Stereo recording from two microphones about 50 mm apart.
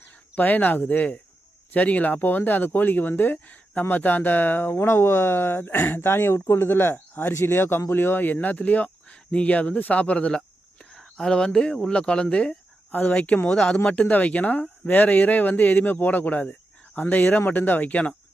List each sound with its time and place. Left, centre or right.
0.3 s speech: left
7.3 s speech: left
10.3 s speech: centre
12.9 s speech: left